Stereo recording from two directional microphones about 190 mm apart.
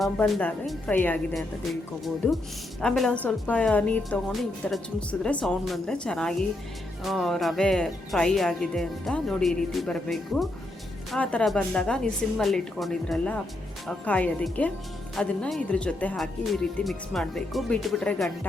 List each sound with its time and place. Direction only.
0.0 s a woman's voice: 5° left (ahead or behind)
2.8 s a woman's voice: centre (ahead or behind)